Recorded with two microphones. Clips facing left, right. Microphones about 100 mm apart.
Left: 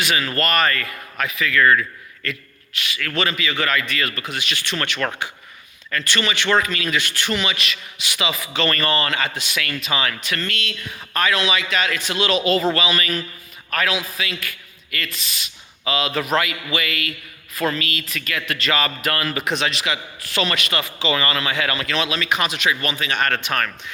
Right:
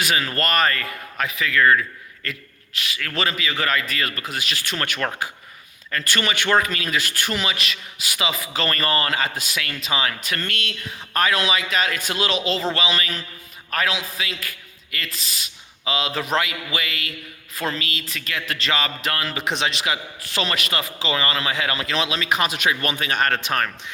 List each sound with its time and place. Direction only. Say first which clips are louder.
0.0 s a man's voice: left 1 dB; 35° right (ahead or behind); by 1.8 s 20° right (ahead or behind)
3.2 s a man's voice: left 2 dB; 35° right (ahead or behind)
5.0 s speech: left 1 dB; 15° right (ahead or behind)
5.9 s a man's voice: left 1 dB; 40° right (ahead or behind)
9.6 s speech: left 2 dB; 20° right (ahead or behind)
10.2 s a man's voice: left 1 dB; 45° right (ahead or behind)
12.3 s a man's voice: left 7 dB; 20° right (ahead or behind)
18.8 s a man's voice: left 2 dB; 20° right (ahead or behind)